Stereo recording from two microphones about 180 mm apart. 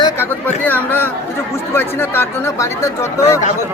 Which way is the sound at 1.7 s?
10° left (ahead or behind).